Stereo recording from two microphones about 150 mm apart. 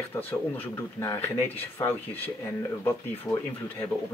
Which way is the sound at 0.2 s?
10° left (ahead or behind).